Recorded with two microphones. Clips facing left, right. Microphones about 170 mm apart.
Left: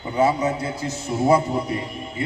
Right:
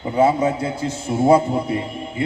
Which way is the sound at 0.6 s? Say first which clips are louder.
Right 4 dB; 30° right (ahead or behind).